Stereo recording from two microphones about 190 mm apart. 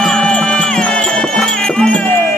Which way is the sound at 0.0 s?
5° left (ahead or behind).